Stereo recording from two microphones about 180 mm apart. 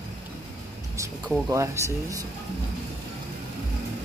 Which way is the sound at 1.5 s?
15° right (ahead or behind).